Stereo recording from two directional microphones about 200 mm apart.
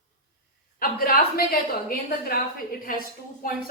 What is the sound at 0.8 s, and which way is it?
A woman's voice, 45° left (ahead or behind).